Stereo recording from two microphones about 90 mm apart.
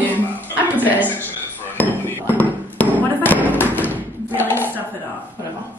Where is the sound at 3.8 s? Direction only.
20° right (ahead or behind).